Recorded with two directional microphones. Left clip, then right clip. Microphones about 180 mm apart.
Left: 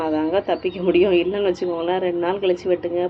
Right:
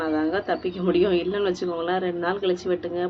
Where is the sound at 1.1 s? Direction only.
40° right (ahead or behind).